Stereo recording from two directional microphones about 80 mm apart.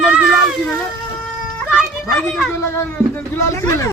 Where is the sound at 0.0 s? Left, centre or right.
Centre.